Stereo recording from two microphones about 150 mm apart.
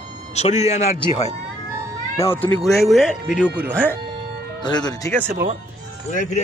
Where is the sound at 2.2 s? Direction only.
20° left (ahead or behind).